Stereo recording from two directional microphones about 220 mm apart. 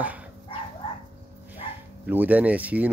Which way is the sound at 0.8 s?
25° left (ahead or behind).